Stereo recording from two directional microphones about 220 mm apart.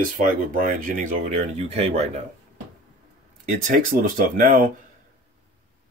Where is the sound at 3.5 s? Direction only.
40° right (ahead or behind).